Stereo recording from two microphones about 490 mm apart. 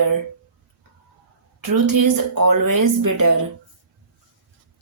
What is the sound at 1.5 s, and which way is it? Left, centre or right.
A woman's voice, right.